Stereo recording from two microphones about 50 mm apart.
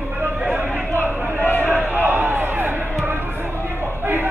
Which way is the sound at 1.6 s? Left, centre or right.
Right.